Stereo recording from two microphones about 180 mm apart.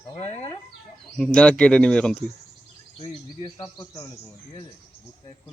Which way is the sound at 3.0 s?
30° left (ahead or behind).